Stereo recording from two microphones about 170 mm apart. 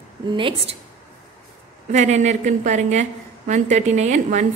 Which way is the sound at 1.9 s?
45° right (ahead or behind).